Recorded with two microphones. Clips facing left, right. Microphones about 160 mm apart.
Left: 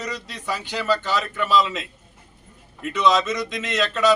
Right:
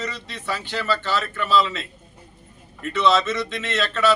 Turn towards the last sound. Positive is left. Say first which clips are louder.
# left 1 dB
turn(degrees=15)  # may be behind; listen again after turning